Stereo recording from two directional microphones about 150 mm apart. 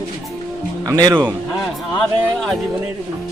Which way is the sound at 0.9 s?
25° right (ahead or behind).